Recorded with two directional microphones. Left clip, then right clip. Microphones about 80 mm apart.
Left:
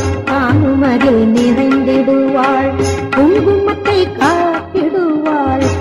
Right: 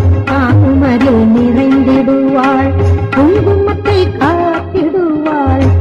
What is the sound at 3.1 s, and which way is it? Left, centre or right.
Music, right.